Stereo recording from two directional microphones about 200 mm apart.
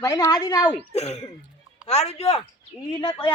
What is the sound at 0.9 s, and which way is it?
A woman's voice, 30° left (ahead or behind).